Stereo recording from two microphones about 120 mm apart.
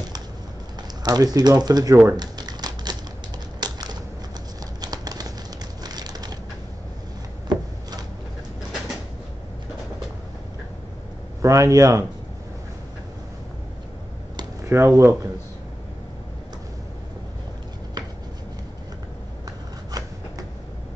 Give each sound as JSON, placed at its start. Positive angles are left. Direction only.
{"t": 1.0, "sound": "speech", "side_deg": -35}
{"t": 3.5, "sound": "typewriter", "side_deg": -35}
{"t": 4.8, "sound": "a sound", "side_deg": -35}
{"t": 5.9, "sound": "crushing", "side_deg": -35}
{"t": 7.5, "sound": "a sound", "side_deg": -35}
{"t": 11.4, "sound": "speech", "side_deg": -25}
{"t": 14.7, "sound": "speech", "side_deg": -25}